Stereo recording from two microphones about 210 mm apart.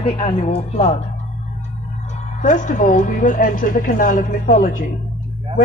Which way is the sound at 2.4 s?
35° left (ahead or behind).